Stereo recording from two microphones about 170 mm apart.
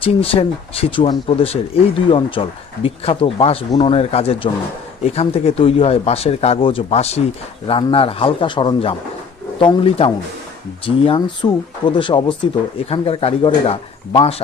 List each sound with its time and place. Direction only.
0.0 s speech: 35° left (ahead or behind)